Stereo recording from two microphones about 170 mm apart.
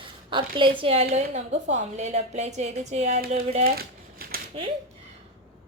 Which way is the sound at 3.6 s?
65° right (ahead or behind).